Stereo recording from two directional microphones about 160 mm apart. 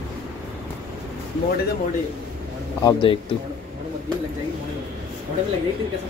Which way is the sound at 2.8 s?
25° left (ahead or behind).